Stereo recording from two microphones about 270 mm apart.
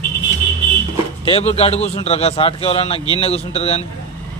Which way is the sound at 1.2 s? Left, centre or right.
Left.